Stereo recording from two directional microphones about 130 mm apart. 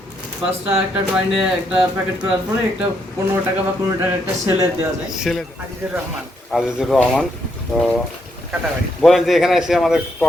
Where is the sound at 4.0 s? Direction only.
20° right (ahead or behind).